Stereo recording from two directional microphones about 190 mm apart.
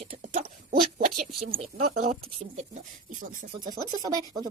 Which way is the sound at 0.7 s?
50° right (ahead or behind).